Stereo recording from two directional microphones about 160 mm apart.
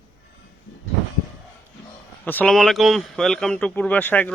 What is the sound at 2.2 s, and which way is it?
Speech, 10° left (ahead or behind).